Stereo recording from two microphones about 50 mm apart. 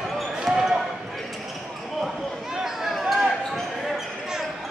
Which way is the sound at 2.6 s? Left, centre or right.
Centre.